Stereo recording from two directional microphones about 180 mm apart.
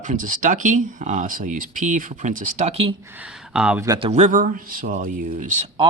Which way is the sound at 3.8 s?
20° right (ahead or behind).